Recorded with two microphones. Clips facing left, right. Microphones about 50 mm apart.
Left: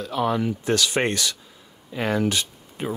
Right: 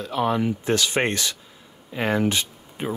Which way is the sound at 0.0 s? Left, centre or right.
Right.